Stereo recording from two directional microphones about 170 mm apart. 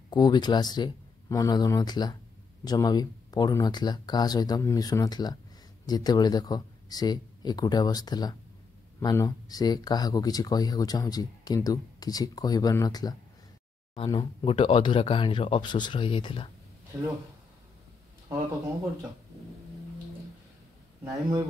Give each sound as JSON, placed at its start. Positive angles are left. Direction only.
{"t": 0.1, "sound": "speech", "side_deg": 25}
{"t": 21.0, "sound": "speech", "side_deg": -20}